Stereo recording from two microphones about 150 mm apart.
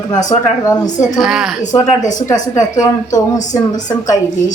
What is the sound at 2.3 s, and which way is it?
A woman's voice, 20° left (ahead or behind).